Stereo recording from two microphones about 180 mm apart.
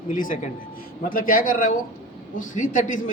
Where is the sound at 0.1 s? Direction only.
50° left (ahead or behind).